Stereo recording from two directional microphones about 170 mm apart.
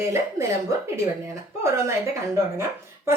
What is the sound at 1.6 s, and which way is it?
Speech, 15° right (ahead or behind).